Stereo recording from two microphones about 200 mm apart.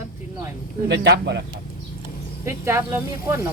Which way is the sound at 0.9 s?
60° right (ahead or behind).